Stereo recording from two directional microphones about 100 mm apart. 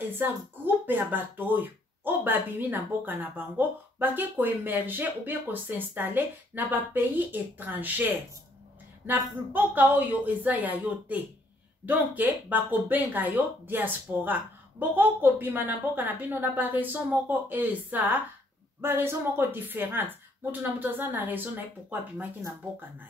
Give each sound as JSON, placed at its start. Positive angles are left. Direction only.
{"t": 0.1, "sound": "a woman's voice", "side_deg": -20}